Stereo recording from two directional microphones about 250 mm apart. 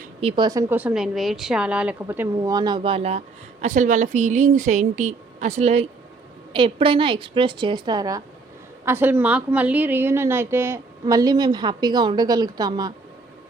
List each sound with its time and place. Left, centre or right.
0.2 s a woman's voice: centre